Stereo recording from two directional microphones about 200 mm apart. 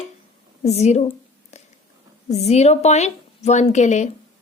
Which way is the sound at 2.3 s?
35° left (ahead or behind).